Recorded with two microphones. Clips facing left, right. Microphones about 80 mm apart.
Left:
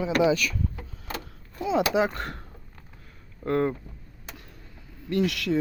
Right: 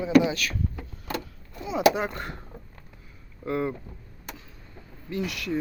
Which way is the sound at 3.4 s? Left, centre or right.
Left.